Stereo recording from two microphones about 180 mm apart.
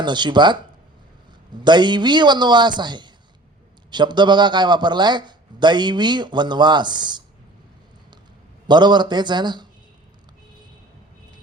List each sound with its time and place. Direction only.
0.0 s speech: 25° right (ahead or behind)
1.6 s speech: 25° right (ahead or behind)
8.6 s speech: 25° right (ahead or behind)